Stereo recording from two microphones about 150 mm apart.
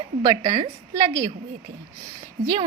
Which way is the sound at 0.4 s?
50° right (ahead or behind).